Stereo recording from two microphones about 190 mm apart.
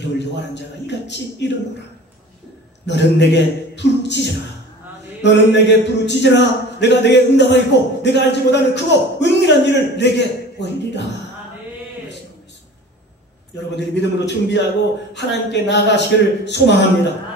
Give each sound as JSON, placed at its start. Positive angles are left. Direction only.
{"t": 0.2, "sound": "a man's voice", "side_deg": 65}
{"t": 2.9, "sound": "a man's voice", "side_deg": 65}
{"t": 13.7, "sound": "a man's voice", "side_deg": 65}